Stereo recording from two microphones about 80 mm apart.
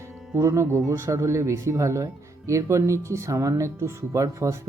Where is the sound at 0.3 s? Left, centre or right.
Right.